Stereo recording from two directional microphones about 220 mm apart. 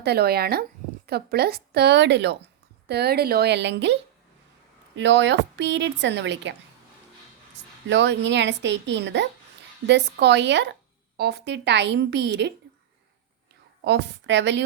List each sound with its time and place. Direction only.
0.0 s a woman's voice: 45° right (ahead or behind)
4.9 s a woman's voice: 55° right (ahead or behind)
7.9 s a woman's voice: 55° right (ahead or behind)
13.8 s a woman's voice: 50° right (ahead or behind)